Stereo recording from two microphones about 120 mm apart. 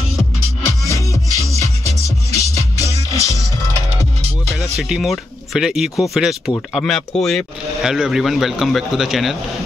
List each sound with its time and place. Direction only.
2.0 s music: 25° left (ahead or behind)
4.6 s speech: 5° right (ahead or behind)